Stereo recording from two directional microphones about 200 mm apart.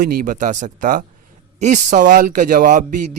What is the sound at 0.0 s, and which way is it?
Speech, 50° right (ahead or behind).